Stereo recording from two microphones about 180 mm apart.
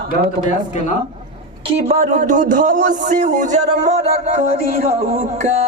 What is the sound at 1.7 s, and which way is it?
Speech, 35° right (ahead or behind).